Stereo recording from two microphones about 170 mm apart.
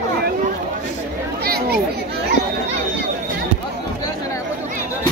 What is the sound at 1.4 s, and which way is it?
Chatter, 65° right (ahead or behind).